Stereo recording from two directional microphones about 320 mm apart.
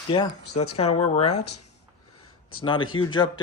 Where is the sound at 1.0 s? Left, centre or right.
Left.